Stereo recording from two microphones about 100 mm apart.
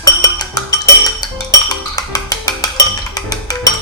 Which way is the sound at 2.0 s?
35° left (ahead or behind).